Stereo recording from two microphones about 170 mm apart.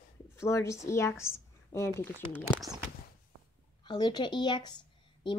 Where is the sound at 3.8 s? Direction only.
25° left (ahead or behind).